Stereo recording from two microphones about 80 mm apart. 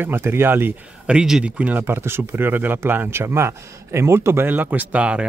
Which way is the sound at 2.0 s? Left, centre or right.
Right.